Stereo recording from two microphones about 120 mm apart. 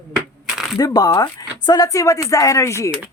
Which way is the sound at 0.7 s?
30° left (ahead or behind).